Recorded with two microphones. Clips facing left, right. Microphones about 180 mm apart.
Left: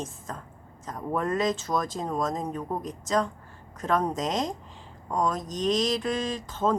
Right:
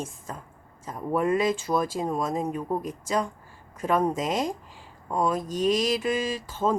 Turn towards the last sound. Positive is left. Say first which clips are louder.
# even
turn(degrees=-10)  # may be behind; listen again after turning